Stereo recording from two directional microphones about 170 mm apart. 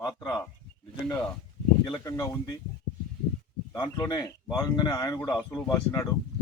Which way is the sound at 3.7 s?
20° left (ahead or behind).